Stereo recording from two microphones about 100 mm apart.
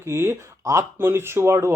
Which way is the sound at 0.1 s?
25° right (ahead or behind).